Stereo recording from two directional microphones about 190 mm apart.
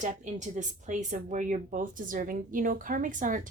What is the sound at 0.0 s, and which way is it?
Speech, 40° right (ahead or behind).